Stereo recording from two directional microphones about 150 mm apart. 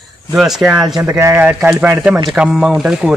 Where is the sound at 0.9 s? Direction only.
20° right (ahead or behind).